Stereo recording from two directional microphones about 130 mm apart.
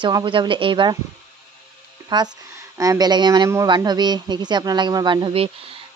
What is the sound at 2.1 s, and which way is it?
Speech, 35° right (ahead or behind).